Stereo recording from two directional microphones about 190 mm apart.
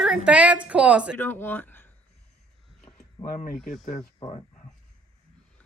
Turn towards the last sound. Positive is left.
turn(degrees=30)  # may be behind; listen again after turning